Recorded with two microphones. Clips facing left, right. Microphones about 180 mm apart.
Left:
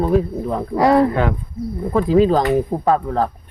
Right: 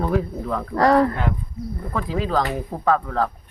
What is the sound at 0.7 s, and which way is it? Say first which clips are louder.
Speech: left 2 dB; 10° left (ahead or behind).